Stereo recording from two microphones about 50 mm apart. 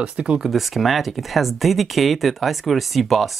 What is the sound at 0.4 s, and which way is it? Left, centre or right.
Speech, centre.